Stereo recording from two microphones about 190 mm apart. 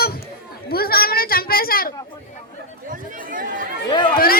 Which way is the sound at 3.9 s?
25° left (ahead or behind).